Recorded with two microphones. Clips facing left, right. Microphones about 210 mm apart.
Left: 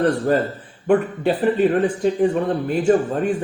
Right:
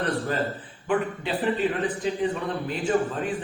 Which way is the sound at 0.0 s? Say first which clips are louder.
Left 8 dB; 45° left (ahead or behind).